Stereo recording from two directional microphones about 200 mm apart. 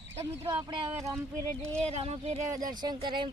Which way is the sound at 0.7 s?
25° right (ahead or behind).